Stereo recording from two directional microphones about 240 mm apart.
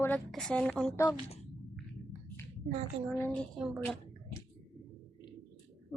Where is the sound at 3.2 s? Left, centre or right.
Centre.